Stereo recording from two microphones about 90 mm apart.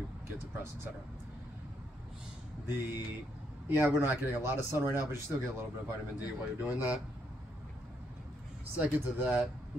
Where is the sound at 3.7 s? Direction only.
25° right (ahead or behind).